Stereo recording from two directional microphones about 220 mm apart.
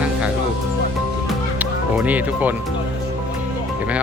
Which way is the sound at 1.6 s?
5° right (ahead or behind).